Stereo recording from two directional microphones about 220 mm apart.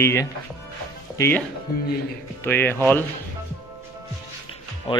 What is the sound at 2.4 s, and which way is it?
Speech, 10° left (ahead or behind).